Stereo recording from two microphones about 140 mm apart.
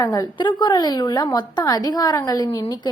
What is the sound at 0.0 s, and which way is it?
A woman's voice, 25° left (ahead or behind).